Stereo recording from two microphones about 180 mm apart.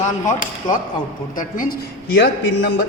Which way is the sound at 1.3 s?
50° left (ahead or behind).